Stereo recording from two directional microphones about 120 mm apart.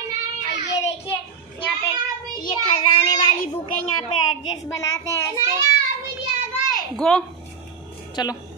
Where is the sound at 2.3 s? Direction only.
40° left (ahead or behind).